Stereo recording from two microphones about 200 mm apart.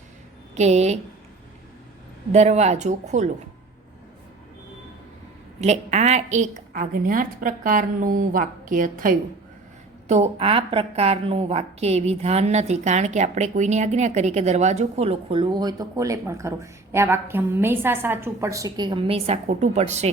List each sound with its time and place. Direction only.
0.5 s a woman's voice: 35° right (ahead or behind)
2.3 s a woman's voice: 35° right (ahead or behind)
5.5 s a woman's voice: 35° right (ahead or behind)